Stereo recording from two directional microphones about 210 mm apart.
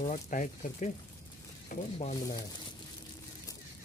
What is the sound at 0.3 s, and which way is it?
Speech, 35° left (ahead or behind).